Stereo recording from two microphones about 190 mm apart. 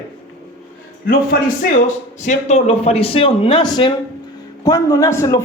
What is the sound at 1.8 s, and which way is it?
A man's voice, 40° left (ahead or behind).